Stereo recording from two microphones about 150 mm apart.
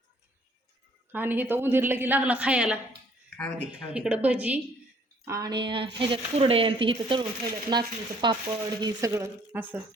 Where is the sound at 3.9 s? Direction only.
10° right (ahead or behind).